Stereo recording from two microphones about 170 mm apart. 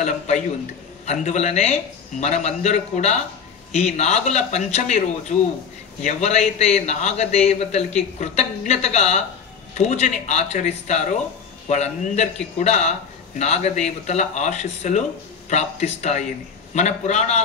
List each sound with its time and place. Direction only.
1.0 s a man's voice: 40° left (ahead or behind)
6.0 s a man's voice: 40° left (ahead or behind)